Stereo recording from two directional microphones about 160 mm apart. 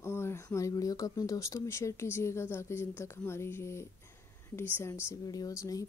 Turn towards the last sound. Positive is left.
turn(degrees=20)  # may be behind; listen again after turning